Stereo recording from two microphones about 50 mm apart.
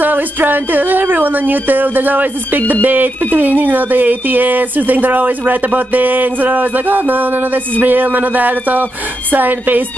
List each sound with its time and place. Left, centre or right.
0.0 s speech: right